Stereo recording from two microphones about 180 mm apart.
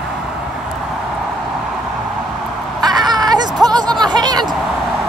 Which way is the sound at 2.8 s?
20° right (ahead or behind).